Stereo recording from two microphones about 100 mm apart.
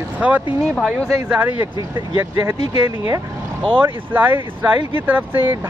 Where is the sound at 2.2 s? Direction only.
30° right (ahead or behind).